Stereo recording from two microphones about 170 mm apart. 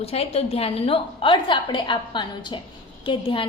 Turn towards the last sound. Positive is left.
turn(degrees=30)  # may be behind; listen again after turning